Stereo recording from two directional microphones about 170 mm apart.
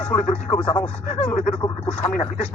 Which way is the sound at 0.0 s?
40° left (ahead or behind).